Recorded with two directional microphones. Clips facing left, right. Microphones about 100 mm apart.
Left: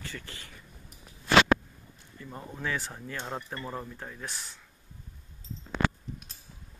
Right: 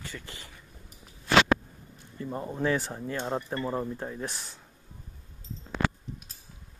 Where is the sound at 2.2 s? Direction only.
30° right (ahead or behind).